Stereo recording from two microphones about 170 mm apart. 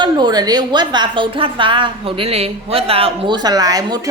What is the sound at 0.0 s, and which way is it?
A woman's voice, 25° right (ahead or behind).